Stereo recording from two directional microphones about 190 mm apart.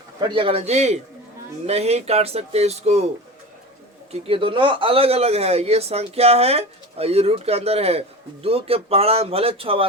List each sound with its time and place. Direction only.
0.2 s speech: 25° right (ahead or behind)
4.1 s speech: 30° right (ahead or behind)